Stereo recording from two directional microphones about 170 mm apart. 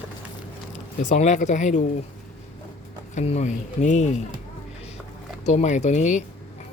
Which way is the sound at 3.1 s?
40° left (ahead or behind).